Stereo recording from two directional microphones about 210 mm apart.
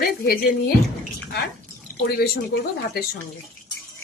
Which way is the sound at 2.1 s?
50° left (ahead or behind).